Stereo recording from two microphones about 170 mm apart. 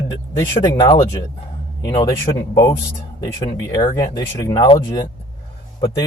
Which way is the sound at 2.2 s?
20° left (ahead or behind).